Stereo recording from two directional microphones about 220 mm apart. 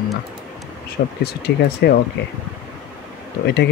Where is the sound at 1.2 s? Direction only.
45° left (ahead or behind).